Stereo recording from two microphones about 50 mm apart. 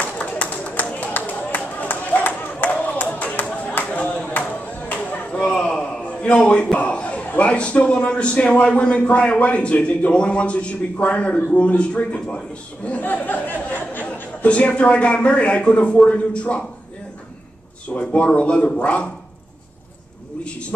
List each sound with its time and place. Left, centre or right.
0.0 s a sound: left
5.4 s a sound: centre
7.3 s a man's voice: left
13.0 s speech: left
13.7 s chatter: left
14.1 s a man's voice: left
17.8 s a man's voice: left